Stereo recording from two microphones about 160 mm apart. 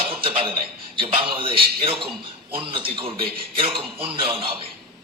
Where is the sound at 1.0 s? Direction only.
35° right (ahead or behind).